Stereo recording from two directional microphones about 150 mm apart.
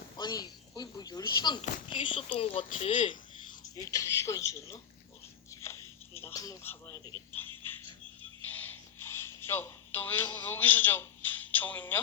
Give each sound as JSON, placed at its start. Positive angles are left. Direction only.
{"t": 0.2, "sound": "speech", "side_deg": 30}
{"t": 3.6, "sound": "speech", "side_deg": 25}
{"t": 5.5, "sound": "a sound", "side_deg": 20}
{"t": 6.6, "sound": "speech", "side_deg": 15}
{"t": 7.6, "sound": "frog", "side_deg": 15}
{"t": 8.4, "sound": "a sound", "side_deg": 10}
{"t": 10.5, "sound": "a man's voice", "side_deg": 10}